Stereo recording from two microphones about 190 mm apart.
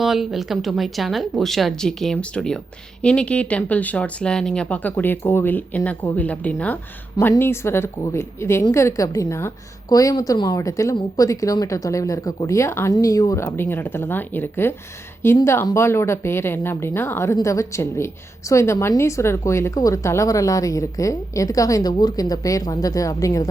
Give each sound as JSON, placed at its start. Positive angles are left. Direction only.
{"t": 0.0, "sound": "speech", "side_deg": 0}